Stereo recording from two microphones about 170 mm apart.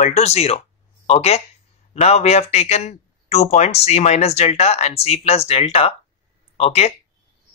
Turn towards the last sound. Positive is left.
turn(degrees=40)  # may be behind; listen again after turning